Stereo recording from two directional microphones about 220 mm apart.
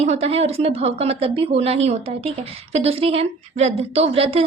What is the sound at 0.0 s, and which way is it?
A woman's voice, 30° right (ahead or behind).